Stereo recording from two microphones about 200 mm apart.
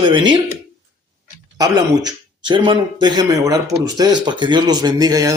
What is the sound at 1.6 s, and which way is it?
Speech, 20° right (ahead or behind).